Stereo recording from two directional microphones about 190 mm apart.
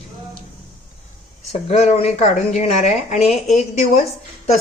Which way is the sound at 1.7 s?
35° left (ahead or behind).